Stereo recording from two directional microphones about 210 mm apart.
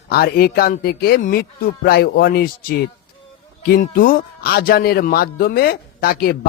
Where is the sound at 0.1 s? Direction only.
50° left (ahead or behind).